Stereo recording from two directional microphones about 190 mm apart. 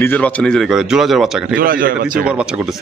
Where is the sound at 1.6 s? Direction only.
50° right (ahead or behind).